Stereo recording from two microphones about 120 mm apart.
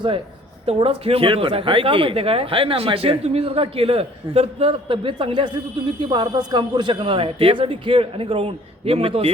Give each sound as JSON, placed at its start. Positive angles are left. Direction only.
{"t": 0.6, "sound": "a woman's voice", "side_deg": -55}